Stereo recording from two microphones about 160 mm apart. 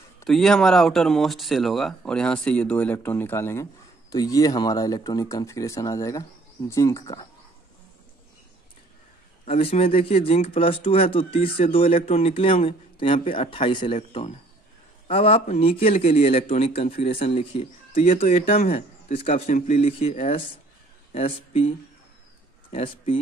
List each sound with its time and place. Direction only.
0.3 s speech: 5° left (ahead or behind); by 7.2 s 20° left (ahead or behind)
9.5 s a man's voice: 40° left (ahead or behind)